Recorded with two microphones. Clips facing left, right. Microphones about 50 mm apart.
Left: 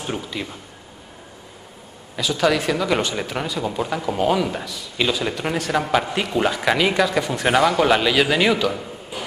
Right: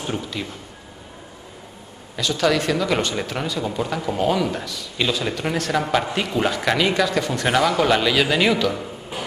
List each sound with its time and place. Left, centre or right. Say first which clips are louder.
0.0 s speech: even; centre
2.1 s speech: left 1 dB; centre